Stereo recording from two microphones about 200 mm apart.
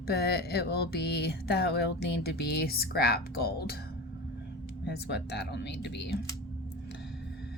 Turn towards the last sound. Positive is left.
turn(degrees=60)  # may be behind; listen again after turning